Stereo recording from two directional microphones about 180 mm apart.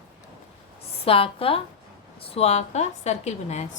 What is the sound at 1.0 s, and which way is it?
A woman's voice, 30° left (ahead or behind).